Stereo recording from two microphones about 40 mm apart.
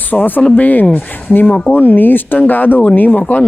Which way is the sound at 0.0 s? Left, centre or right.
Left.